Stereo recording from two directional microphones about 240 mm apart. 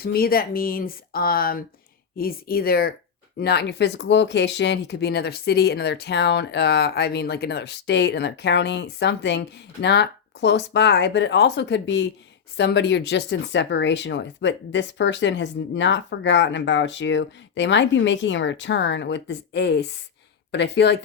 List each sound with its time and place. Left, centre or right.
0.0 s speech: left